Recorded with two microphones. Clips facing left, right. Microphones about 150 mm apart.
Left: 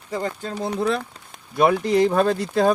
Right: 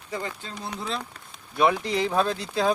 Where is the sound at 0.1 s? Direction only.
40° left (ahead or behind); by 1.0 s 60° left (ahead or behind).